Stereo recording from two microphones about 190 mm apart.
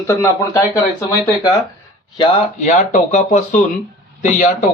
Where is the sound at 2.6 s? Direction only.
40° left (ahead or behind).